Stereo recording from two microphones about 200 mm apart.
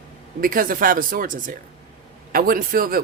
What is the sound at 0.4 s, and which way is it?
A man's voice, 45° right (ahead or behind).